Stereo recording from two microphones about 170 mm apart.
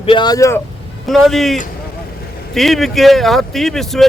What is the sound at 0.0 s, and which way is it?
Speech, 30° left (ahead or behind).